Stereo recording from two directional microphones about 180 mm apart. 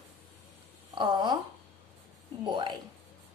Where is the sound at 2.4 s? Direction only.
25° right (ahead or behind).